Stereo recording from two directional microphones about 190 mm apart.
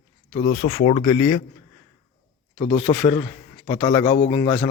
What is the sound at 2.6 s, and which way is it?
A man's voice, 35° left (ahead or behind).